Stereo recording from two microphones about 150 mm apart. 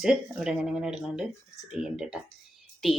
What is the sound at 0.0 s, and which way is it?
Speech, 5° right (ahead or behind).